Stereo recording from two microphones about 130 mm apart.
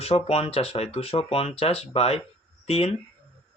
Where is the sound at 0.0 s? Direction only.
50° left (ahead or behind).